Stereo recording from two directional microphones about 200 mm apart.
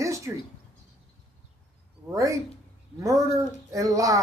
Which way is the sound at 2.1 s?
15° right (ahead or behind).